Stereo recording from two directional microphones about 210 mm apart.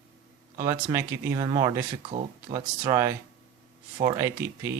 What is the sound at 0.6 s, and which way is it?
Speech, 15° right (ahead or behind).